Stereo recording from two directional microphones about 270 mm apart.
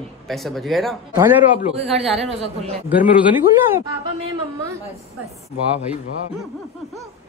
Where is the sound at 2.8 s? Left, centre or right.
Centre.